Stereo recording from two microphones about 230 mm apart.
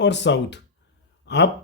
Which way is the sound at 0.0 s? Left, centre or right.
Left.